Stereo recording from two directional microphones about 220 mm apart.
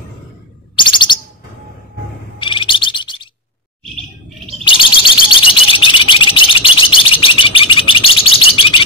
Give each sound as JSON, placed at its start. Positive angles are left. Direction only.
{"t": 0.7, "sound": "bird", "side_deg": 20}
{"t": 2.4, "sound": "bird", "side_deg": 20}
{"t": 4.6, "sound": "bird", "side_deg": 20}